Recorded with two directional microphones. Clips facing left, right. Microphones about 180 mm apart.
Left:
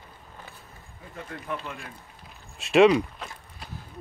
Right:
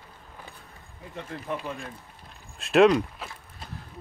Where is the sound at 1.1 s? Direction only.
25° right (ahead or behind).